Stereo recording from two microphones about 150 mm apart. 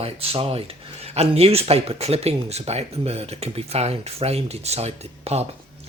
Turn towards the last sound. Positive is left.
turn(degrees=-45)  # may be behind; listen again after turning